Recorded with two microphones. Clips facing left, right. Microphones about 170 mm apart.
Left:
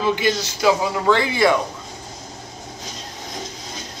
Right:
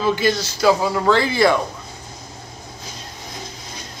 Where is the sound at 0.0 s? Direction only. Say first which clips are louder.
Right 1 dB; 15° left (ahead or behind).